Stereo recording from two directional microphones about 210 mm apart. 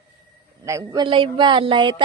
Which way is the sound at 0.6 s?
15° right (ahead or behind).